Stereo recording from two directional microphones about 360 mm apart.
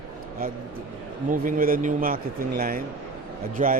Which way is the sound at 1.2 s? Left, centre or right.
Right.